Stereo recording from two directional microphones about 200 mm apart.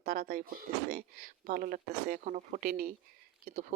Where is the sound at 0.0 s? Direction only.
50° right (ahead or behind).